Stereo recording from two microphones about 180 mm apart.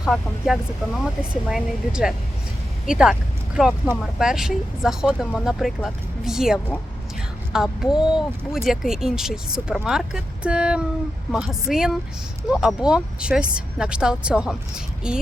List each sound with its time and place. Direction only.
0.0 s speech: centre (ahead or behind)